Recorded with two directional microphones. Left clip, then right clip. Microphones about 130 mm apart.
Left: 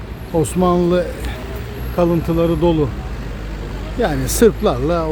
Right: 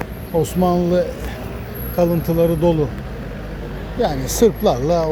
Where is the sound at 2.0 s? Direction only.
25° left (ahead or behind).